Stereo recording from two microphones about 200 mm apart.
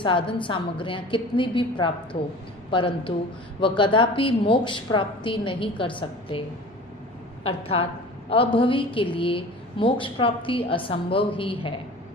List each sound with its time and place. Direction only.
0.0 s a woman's voice: 25° left (ahead or behind)
7.4 s a woman's voice: 30° left (ahead or behind)